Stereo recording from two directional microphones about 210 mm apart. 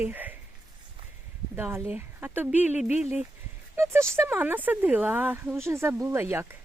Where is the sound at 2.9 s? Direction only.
30° left (ahead or behind).